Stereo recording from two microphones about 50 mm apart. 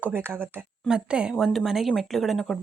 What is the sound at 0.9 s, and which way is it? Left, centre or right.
Speech, centre.